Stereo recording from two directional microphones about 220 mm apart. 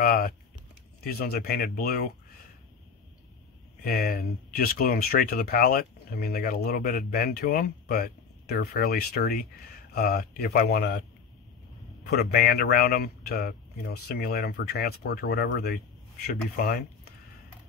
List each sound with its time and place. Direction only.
0.0 s speech: 40° left (ahead or behind)
3.8 s speech: 40° left (ahead or behind)
12.1 s speech: 45° left (ahead or behind)